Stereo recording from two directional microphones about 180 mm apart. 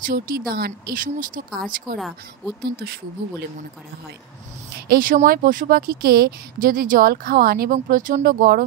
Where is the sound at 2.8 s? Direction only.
65° right (ahead or behind).